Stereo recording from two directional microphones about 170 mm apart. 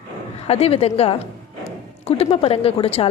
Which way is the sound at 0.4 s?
35° left (ahead or behind).